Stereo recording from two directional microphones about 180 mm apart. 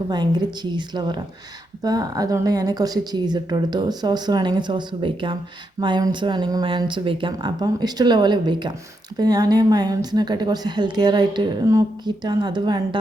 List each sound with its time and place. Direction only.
0.1 s a woman's voice: 25° right (ahead or behind)